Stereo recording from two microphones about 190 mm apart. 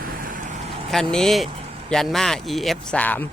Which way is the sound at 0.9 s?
5° left (ahead or behind).